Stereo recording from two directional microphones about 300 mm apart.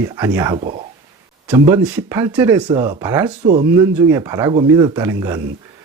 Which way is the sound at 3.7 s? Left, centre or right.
Centre.